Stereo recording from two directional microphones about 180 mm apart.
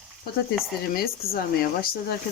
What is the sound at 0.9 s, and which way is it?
Speech, 55° left (ahead or behind).